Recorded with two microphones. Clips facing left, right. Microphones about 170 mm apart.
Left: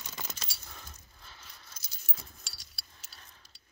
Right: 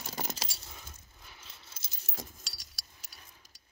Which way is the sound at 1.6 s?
25° right (ahead or behind).